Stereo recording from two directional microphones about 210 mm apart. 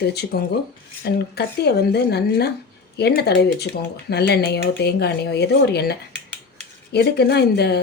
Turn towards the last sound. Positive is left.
turn(degrees=50)  # may be behind; listen again after turning